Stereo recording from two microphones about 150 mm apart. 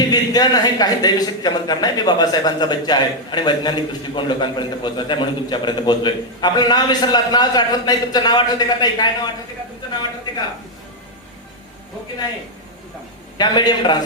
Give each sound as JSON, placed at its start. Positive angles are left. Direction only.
{"t": 0.0, "sound": "speech", "side_deg": 25}
{"t": 13.4, "sound": "speech", "side_deg": 30}